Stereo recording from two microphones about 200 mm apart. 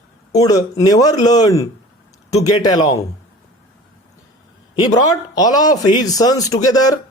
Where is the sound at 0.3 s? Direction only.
15° left (ahead or behind).